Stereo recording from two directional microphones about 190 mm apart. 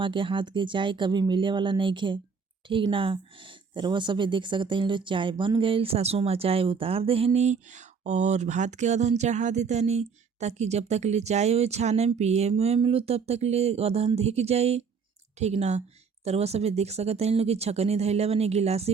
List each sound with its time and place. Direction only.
0.0 s speech: 25° right (ahead or behind)